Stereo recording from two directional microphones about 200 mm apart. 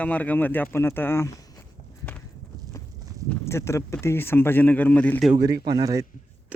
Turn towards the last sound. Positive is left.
turn(degrees=-15)  # may be behind; listen again after turning